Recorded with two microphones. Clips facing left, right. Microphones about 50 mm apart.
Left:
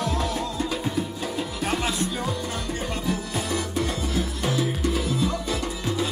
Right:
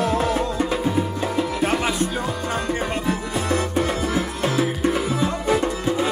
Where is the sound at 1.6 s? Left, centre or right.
Right.